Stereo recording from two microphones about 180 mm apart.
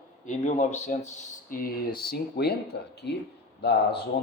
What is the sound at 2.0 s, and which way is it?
Speech, 60° left (ahead or behind).